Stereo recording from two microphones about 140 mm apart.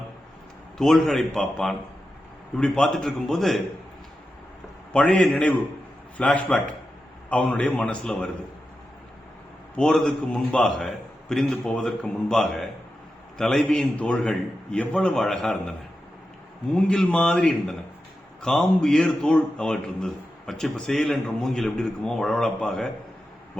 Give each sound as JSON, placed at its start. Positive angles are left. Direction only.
{"t": 0.8, "sound": "a man's voice", "side_deg": 0}
{"t": 4.9, "sound": "a man's voice", "side_deg": 10}
{"t": 9.7, "sound": "a man's voice", "side_deg": 5}
{"t": 16.7, "sound": "a man's voice", "side_deg": 5}